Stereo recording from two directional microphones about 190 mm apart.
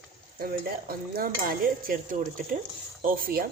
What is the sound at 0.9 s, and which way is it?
Speech, 50° right (ahead or behind).